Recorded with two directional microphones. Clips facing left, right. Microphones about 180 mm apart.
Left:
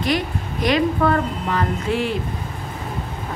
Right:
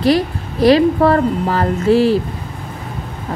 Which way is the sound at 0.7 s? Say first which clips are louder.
Right 7 dB; 35° right (ahead or behind).